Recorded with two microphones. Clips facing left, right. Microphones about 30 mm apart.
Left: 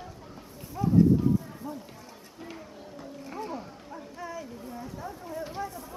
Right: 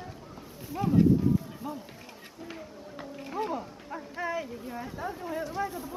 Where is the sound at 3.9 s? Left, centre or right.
Right.